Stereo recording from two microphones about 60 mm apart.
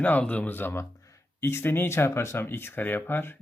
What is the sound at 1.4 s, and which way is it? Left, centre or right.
Speech, left.